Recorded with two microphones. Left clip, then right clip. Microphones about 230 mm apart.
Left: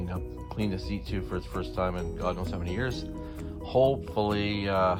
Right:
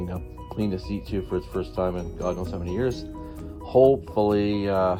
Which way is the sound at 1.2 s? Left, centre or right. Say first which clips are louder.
Right 9 dB; left.